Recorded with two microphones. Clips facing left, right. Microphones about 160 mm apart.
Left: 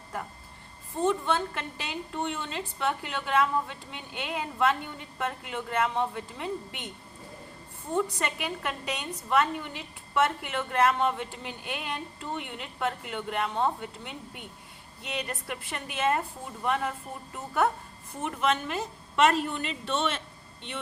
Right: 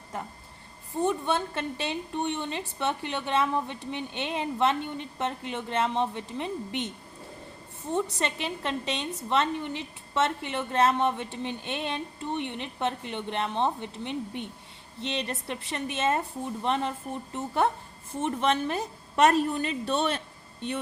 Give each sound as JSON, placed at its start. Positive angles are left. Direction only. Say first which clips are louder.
{"t": 0.9, "sound": "a woman's voice", "louder": "even", "side_deg": -15}
{"t": 7.9, "sound": "a woman's voice", "louder": "even", "side_deg": -25}
{"t": 18.2, "sound": "a woman's voice", "louder": "right 2 dB", "side_deg": -30}